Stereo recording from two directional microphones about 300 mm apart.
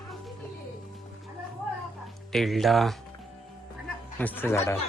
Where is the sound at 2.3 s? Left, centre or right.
Centre.